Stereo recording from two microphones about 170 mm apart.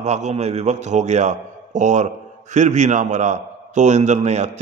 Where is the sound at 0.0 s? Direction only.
40° right (ahead or behind).